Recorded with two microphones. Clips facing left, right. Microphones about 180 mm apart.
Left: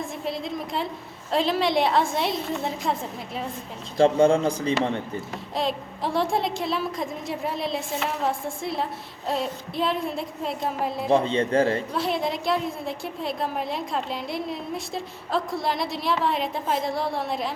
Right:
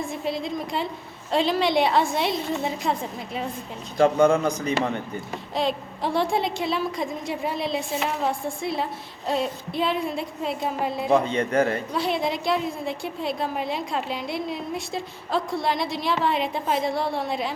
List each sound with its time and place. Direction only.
0.1 s a woman's voice: centre (ahead or behind)
3.9 s speech: 30° left (ahead or behind)
5.5 s a woman's voice: centre (ahead or behind)
11.1 s speech: 30° left (ahead or behind)
11.9 s a woman's voice: centre (ahead or behind)